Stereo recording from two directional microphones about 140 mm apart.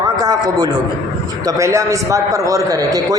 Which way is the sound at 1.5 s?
20° right (ahead or behind).